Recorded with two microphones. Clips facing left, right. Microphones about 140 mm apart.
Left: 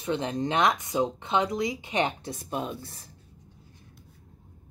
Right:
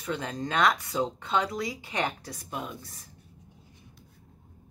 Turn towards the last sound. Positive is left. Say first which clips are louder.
# left 5 dB
turn(degrees=30)  # may be behind; listen again after turning